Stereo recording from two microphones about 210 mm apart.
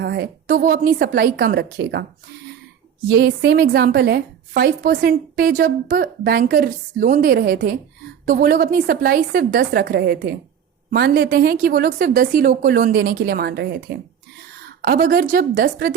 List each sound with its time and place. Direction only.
0.0 s a woman's voice: 50° right (ahead or behind)
3.1 s a woman's voice: 50° right (ahead or behind)